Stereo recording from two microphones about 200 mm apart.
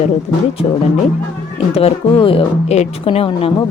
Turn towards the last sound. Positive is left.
turn(degrees=30)  # may be behind; listen again after turning